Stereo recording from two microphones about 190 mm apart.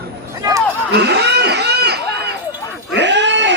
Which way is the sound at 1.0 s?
60° right (ahead or behind).